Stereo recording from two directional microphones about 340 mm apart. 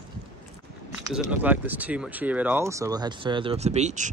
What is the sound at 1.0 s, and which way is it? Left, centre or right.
Speech, centre.